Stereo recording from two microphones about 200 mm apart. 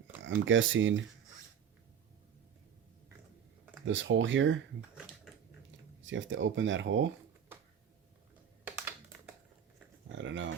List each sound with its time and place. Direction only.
0.3 s speech: 70° right (ahead or behind)
3.8 s speech: 70° right (ahead or behind)
6.0 s speech: 70° right (ahead or behind)
8.6 s computer keyboard: 10° right (ahead or behind)
10.2 s speech: 70° right (ahead or behind)